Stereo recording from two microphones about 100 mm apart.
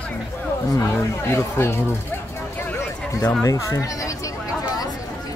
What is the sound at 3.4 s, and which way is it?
Chatter, 30° left (ahead or behind).